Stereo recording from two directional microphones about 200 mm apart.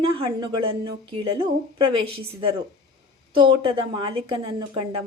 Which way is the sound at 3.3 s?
25° right (ahead or behind).